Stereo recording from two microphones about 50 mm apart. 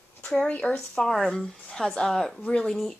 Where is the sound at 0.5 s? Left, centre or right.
Left.